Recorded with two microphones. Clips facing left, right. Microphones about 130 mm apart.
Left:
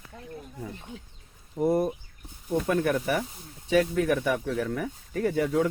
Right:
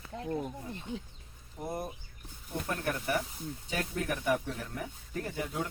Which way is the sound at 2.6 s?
90° left.